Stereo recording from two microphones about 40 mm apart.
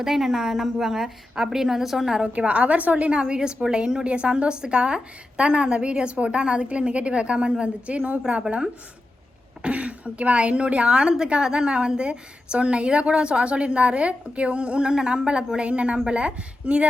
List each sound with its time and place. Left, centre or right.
0.0 s a woman's voice: centre
2.3 s a woman's voice: right
3.2 s a woman's voice: right